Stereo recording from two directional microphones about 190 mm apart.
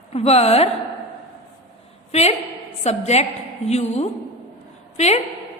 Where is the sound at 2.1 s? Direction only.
35° left (ahead or behind).